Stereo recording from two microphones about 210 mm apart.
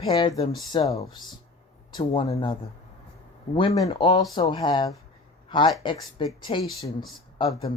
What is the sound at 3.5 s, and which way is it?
Speech, 25° left (ahead or behind).